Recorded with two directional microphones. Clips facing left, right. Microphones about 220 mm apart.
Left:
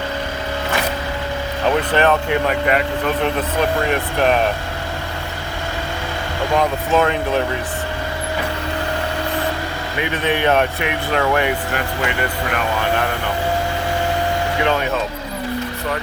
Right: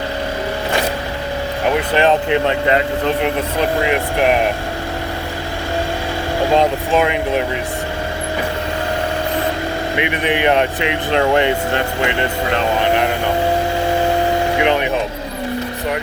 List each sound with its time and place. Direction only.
1.9 s speech: 20° right (ahead or behind)
6.5 s speech: 20° right (ahead or behind)
10.0 s speech: 15° right (ahead or behind)
14.6 s speech: 20° right (ahead or behind)